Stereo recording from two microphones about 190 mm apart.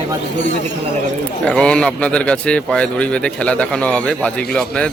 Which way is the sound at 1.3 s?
5° left (ahead or behind).